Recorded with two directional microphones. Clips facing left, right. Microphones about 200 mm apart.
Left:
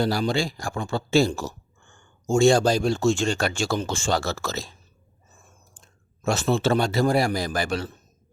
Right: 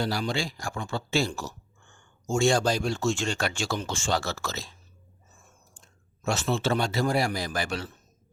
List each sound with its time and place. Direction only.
0.0 s speech: 40° left (ahead or behind)
6.2 s speech: 40° left (ahead or behind)